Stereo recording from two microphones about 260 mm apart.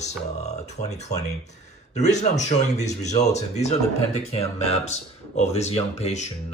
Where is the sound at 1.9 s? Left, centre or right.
Left.